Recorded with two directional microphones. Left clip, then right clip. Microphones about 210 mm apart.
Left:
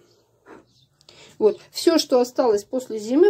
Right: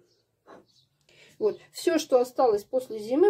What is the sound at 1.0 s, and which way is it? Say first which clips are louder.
Speech: left 8 dB; 25° left (ahead or behind).